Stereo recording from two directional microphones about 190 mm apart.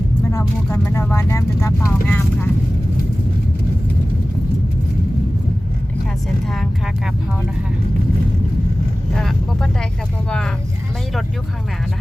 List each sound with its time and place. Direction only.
0.3 s speech: 15° left (ahead or behind)
6.5 s speech: centre (ahead or behind)
9.1 s speech: 5° left (ahead or behind)